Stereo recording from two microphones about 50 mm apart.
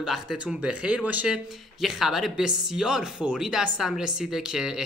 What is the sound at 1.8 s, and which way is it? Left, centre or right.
Speech, centre.